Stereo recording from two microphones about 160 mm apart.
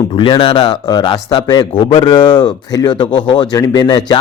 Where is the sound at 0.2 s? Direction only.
30° left (ahead or behind).